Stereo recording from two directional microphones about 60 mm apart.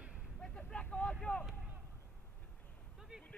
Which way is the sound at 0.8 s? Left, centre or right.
Left.